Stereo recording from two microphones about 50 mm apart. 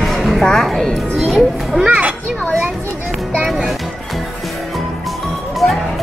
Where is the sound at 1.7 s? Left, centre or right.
Right.